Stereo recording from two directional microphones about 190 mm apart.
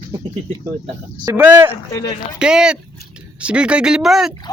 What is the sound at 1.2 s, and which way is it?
Speech, 15° right (ahead or behind).